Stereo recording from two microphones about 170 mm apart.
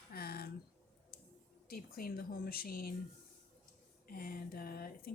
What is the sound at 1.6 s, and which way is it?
Speech, 60° left (ahead or behind).